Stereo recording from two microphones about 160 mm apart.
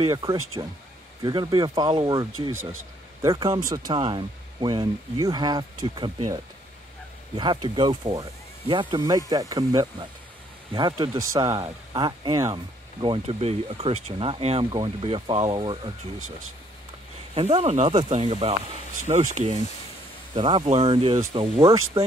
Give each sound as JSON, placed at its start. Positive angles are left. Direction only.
{"t": 0.1, "sound": "speech", "side_deg": -20}
{"t": 17.3, "sound": "speech", "side_deg": -40}
{"t": 18.9, "sound": "speech", "side_deg": -50}
{"t": 20.3, "sound": "speech", "side_deg": -30}
{"t": 22.0, "sound": "speech", "side_deg": -15}